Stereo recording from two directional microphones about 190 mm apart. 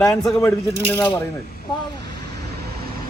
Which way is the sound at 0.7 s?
65° right (ahead or behind).